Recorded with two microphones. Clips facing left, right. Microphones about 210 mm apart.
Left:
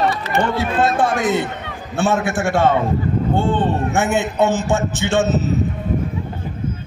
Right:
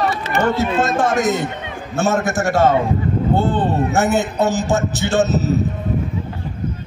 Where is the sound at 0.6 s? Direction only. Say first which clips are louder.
Even; 45° right (ahead or behind).